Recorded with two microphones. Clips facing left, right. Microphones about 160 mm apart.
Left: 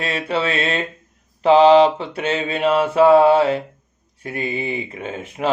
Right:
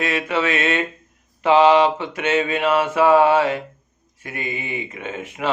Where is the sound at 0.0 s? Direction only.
35° left (ahead or behind).